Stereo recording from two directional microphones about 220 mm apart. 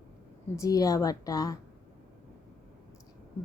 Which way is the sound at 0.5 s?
15° left (ahead or behind).